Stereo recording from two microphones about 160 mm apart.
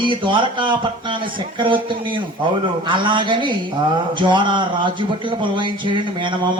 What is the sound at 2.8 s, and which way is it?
A man's voice, 30° right (ahead or behind).